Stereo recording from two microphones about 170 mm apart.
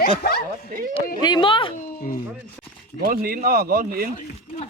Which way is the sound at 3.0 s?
60° right (ahead or behind).